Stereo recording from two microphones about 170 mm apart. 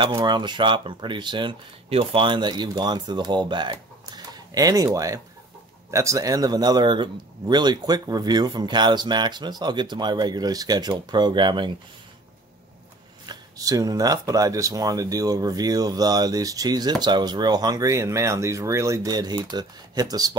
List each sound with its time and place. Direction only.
0.0 s a man's voice: 25° right (ahead or behind)
13.3 s a man's voice: 20° right (ahead or behind)